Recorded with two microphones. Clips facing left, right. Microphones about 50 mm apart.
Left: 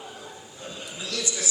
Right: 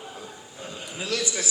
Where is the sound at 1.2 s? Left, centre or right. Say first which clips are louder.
Right 2 dB; right.